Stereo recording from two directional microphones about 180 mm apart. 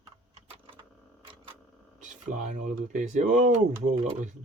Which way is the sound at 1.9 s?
45° right (ahead or behind).